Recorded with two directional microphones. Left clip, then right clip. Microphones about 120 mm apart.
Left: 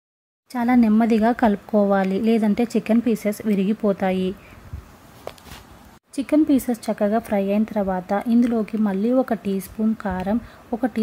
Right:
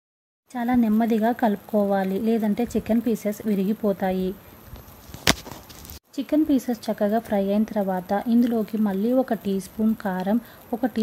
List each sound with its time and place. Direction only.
0.5 s speech: 30° left (ahead or behind)
6.1 s speech: 25° left (ahead or behind)
9.4 s speech: 5° left (ahead or behind)
10.7 s speech: 15° left (ahead or behind)